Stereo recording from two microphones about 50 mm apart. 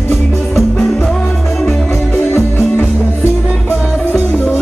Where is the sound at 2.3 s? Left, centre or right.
Left.